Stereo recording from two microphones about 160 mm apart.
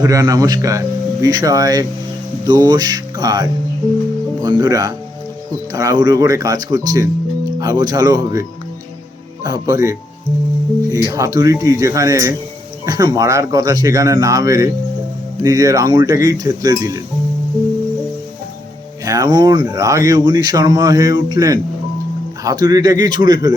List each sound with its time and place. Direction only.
0.0 s speech: 20° right (ahead or behind)
19.0 s speech: 25° right (ahead or behind)